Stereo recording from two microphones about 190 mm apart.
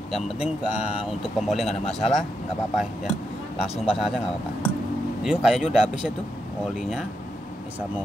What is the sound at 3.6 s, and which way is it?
Speech, 30° left (ahead or behind).